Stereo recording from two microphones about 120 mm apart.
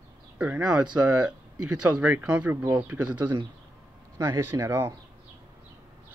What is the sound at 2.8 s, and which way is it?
Speech, 15° right (ahead or behind).